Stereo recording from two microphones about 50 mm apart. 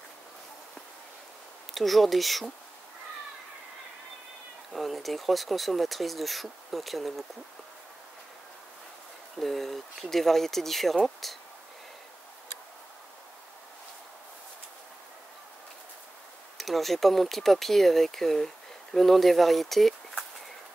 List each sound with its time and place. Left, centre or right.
1.7 s speech: centre
4.7 s speech: centre
9.4 s speech: centre
16.5 s speech: centre